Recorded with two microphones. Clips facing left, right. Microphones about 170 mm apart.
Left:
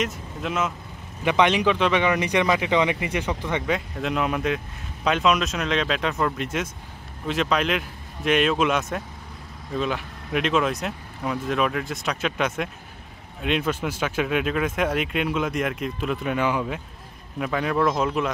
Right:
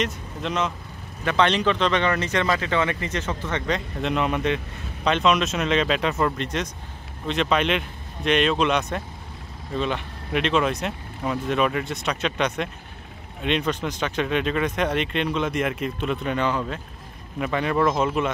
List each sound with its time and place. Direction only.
0.0 s speech: 5° left (ahead or behind)